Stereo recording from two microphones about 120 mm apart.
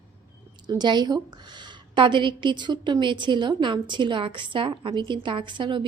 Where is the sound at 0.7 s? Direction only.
35° right (ahead or behind).